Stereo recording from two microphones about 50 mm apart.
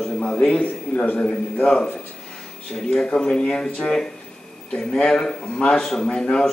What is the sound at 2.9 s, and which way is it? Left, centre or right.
Speech, centre.